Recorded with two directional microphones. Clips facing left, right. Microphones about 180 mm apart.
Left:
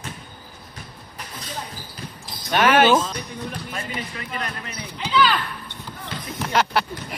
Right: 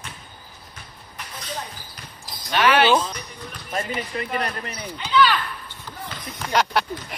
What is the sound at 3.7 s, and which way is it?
Speech, 35° right (ahead or behind).